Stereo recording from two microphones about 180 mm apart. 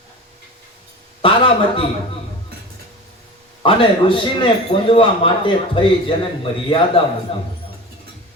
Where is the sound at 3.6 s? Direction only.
30° left (ahead or behind).